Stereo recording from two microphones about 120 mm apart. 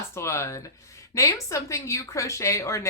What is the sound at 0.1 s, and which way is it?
Speech, 25° left (ahead or behind).